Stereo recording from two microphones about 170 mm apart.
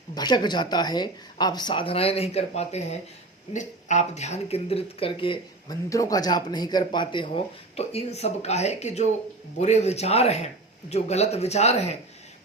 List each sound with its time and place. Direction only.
0.1 s speech: 25° left (ahead or behind)
5.9 s speech: 20° left (ahead or behind); by 11.9 s 40° left (ahead or behind)